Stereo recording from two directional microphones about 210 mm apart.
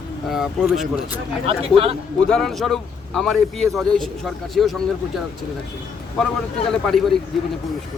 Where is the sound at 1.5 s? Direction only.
25° right (ahead or behind).